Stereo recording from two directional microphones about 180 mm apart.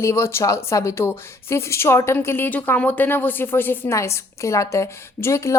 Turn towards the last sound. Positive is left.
turn(degrees=15)  # may be behind; listen again after turning